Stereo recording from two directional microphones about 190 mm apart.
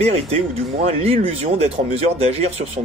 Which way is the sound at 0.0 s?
30° right (ahead or behind).